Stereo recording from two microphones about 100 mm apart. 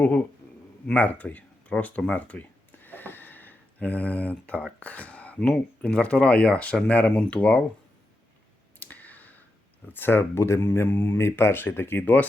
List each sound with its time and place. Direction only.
0.9 s a sound: 15° left (ahead or behind)
4.8 s speech: 15° left (ahead or behind)
8.8 s clicking: 15° left (ahead or behind)
9.9 s speech: 20° left (ahead or behind)